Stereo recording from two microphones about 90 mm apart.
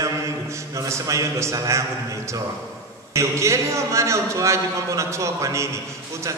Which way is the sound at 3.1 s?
35° right (ahead or behind).